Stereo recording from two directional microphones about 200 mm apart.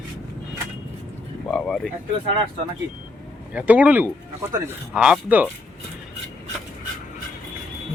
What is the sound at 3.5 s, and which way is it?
Speech, 5° right (ahead or behind).